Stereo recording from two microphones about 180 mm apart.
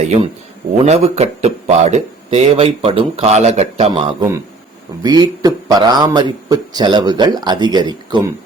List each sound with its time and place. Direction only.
0.9 s speech: 35° right (ahead or behind)
5.0 s speech: 20° right (ahead or behind)